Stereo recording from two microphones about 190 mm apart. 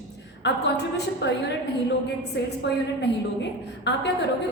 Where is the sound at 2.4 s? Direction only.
65° left (ahead or behind).